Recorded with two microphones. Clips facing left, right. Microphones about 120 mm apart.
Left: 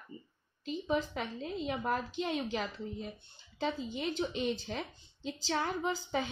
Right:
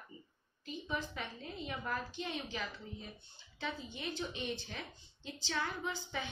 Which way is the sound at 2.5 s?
40° left (ahead or behind).